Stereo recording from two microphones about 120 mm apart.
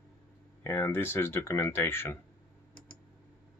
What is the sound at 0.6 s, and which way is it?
Speech, 20° left (ahead or behind).